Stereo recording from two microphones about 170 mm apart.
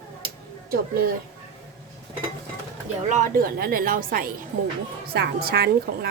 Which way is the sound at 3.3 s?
60° right (ahead or behind).